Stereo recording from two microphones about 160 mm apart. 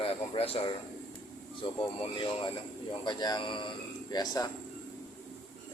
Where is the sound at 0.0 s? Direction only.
35° left (ahead or behind).